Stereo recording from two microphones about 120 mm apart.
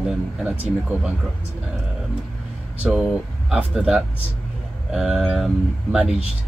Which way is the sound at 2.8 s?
5° right (ahead or behind).